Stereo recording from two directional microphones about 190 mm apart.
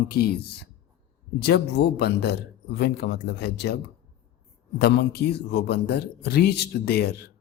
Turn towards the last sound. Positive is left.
turn(degrees=55)  # may be behind; listen again after turning